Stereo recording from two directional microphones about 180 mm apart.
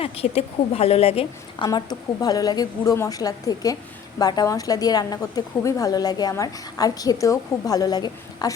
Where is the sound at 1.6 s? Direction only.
20° left (ahead or behind).